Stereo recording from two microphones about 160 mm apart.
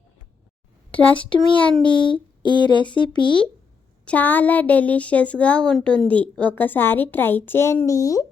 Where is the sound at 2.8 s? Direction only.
30° left (ahead or behind).